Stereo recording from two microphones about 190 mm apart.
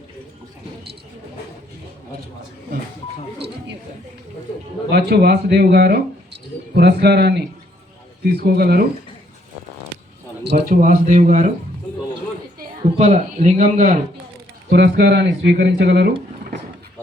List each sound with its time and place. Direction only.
4.9 s speech: 55° right (ahead or behind)
10.4 s speech: 60° right (ahead or behind)
10.8 s speech: 45° right (ahead or behind)
12.5 s a woman's voice: 35° right (ahead or behind)
14.7 s speech: 60° right (ahead or behind)